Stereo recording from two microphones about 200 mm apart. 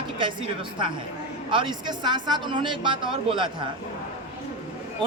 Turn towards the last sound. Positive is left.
turn(degrees=-25)  # may be behind; listen again after turning